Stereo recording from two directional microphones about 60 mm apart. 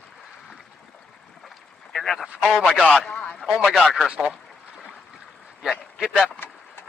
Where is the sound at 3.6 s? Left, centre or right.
Centre.